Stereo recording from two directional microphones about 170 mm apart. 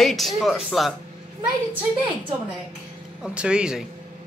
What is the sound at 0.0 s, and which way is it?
Speech, centre (ahead or behind).